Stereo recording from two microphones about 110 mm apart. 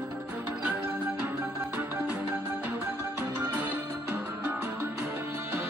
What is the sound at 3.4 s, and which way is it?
Music, 20° right (ahead or behind).